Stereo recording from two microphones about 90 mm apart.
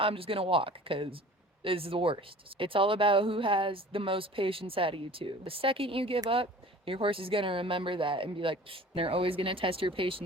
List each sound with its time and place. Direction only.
0.0 s speech: 90° right
1.6 s speech: 90° right